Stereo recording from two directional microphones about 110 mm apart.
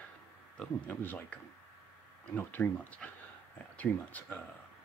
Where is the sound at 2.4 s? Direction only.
15° left (ahead or behind).